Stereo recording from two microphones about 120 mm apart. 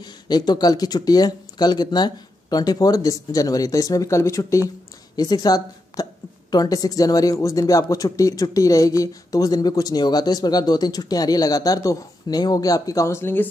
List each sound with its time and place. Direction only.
0.0 s speech: 35° left (ahead or behind); by 13.5 s 20° left (ahead or behind)